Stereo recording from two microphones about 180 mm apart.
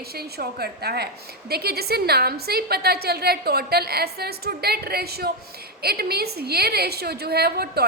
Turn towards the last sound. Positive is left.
turn(degrees=-60)  # may be behind; listen again after turning